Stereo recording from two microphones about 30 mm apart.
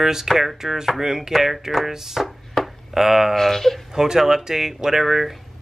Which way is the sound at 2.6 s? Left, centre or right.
Centre.